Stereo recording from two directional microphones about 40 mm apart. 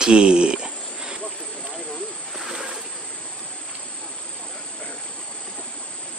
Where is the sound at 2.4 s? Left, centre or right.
Centre.